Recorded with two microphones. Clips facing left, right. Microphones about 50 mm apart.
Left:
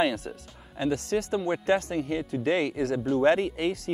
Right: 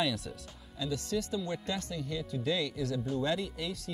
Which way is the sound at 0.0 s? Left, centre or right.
Left.